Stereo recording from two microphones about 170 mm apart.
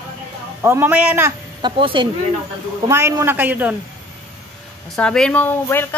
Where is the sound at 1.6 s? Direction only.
30° right (ahead or behind).